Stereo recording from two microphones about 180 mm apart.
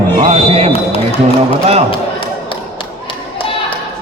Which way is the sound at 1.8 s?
30° left (ahead or behind).